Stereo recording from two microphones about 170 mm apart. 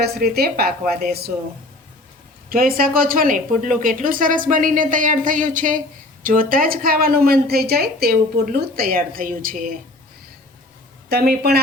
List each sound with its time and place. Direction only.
0.0 s a woman's voice: 65° right (ahead or behind)
2.5 s a woman's voice: 60° right (ahead or behind)
11.1 s speech: 70° right (ahead or behind)